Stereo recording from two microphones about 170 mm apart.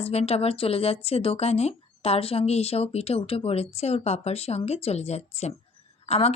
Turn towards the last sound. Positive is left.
turn(degrees=35)  # may be behind; listen again after turning